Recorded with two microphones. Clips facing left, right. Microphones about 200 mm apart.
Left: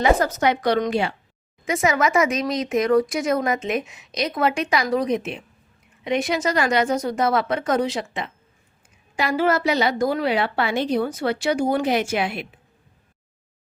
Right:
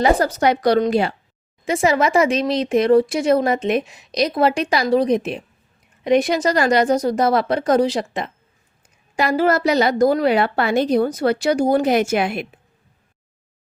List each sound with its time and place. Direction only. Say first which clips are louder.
0.0 s speech: right 2 dB; 35° right (ahead or behind)